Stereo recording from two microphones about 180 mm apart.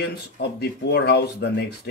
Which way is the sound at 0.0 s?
65° left (ahead or behind).